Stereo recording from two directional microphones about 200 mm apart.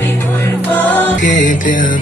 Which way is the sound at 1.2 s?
40° left (ahead or behind).